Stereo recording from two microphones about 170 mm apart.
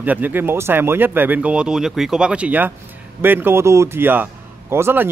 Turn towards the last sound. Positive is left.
turn(degrees=-15)  # may be behind; listen again after turning